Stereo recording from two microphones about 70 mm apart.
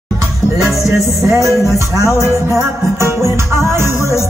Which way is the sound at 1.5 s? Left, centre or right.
Left.